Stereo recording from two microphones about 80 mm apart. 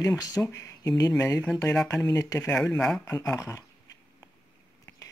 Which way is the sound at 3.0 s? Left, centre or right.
Left.